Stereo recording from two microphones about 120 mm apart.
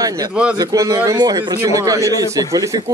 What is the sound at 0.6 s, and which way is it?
A man's voice, 30° right (ahead or behind).